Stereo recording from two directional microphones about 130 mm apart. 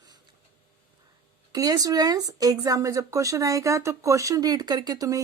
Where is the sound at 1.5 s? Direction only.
30° right (ahead or behind).